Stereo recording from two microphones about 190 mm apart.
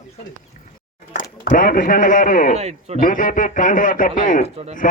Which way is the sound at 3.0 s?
45° left (ahead or behind).